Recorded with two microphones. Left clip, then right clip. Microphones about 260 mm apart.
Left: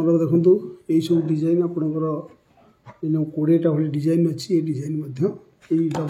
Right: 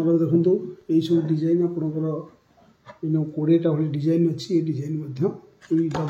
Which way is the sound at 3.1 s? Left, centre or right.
Left.